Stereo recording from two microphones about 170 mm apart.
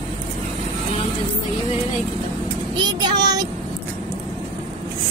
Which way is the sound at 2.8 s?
25° right (ahead or behind).